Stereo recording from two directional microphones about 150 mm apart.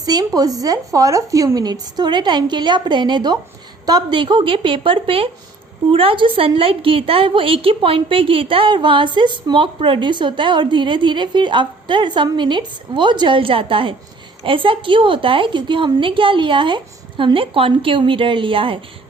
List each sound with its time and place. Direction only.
0.0 s a woman's voice: 25° right (ahead or behind)